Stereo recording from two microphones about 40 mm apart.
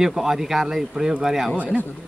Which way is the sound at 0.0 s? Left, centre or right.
Centre.